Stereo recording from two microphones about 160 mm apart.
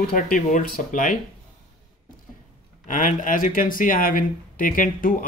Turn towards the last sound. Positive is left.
turn(degrees=60)  # may be behind; listen again after turning